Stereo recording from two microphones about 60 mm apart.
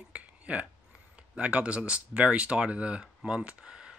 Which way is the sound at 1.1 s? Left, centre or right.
Right.